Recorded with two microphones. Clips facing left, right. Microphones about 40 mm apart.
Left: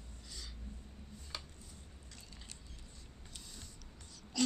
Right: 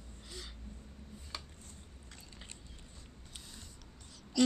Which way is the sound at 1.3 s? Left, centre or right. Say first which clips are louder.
Right 1 dB; centre.